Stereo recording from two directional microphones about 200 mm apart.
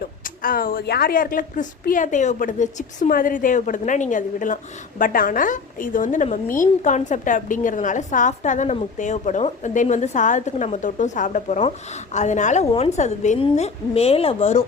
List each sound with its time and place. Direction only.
0.4 s a woman's voice: 45° left (ahead or behind)